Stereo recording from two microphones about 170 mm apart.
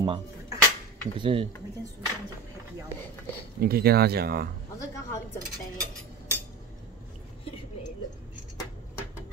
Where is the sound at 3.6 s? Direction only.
65° right (ahead or behind).